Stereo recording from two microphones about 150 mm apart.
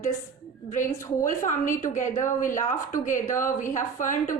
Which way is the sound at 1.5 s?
60° left (ahead or behind).